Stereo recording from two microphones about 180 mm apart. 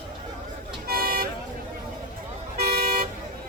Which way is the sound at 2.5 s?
60° right (ahead or behind).